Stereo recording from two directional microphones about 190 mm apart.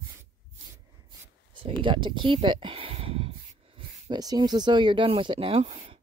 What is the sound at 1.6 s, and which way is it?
Speech, 25° right (ahead or behind).